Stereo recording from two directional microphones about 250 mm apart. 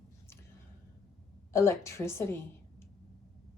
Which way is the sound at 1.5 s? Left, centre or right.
Centre.